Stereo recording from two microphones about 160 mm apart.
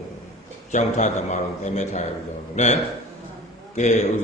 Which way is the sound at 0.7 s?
45° left (ahead or behind).